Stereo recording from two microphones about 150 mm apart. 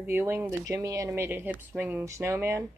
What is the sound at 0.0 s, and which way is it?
Speech, 15° right (ahead or behind).